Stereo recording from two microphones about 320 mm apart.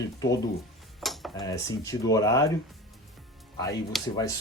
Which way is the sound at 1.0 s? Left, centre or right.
Centre.